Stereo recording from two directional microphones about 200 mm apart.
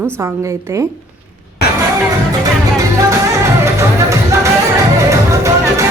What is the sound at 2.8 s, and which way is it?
Music, 15° right (ahead or behind).